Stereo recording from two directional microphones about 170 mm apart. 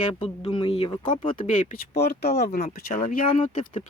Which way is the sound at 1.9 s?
70° left (ahead or behind).